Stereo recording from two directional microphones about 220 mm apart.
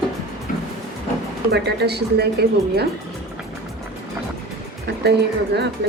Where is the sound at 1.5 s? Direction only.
50° right (ahead or behind).